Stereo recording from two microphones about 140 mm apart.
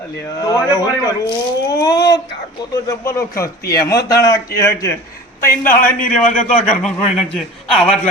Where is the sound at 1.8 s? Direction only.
25° left (ahead or behind).